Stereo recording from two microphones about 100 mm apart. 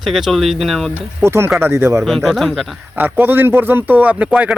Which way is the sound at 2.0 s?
Centre (ahead or behind).